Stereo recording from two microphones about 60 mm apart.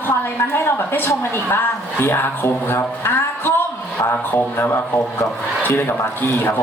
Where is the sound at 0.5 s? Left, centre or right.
Left.